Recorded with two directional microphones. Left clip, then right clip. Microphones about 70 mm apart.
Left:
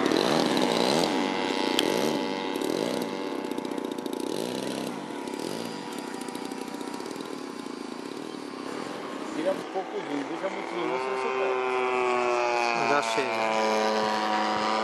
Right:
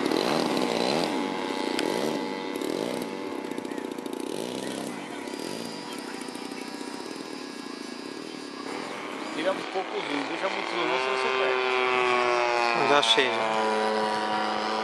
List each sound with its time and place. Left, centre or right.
0.2 s chainsaw: centre
1.1 s vehicle: left
2.6 s a sound: centre
10.1 s speech: right
11.2 s vehicle: right
12.2 s a sound: centre
13.3 s vehicle: left